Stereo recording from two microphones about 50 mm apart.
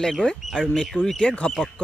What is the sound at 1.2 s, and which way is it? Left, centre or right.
Speech, left.